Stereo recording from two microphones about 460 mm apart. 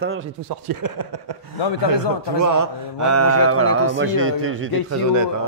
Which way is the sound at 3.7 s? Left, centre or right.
Left.